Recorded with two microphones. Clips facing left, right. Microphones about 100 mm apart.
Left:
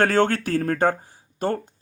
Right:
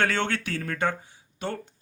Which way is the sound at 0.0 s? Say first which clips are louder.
Left 7 dB; 40° left (ahead or behind).